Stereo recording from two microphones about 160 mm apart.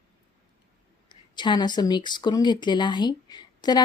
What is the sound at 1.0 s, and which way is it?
Speech, 30° left (ahead or behind).